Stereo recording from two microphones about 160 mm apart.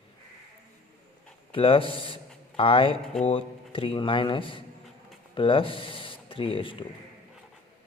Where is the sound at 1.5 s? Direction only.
35° left (ahead or behind).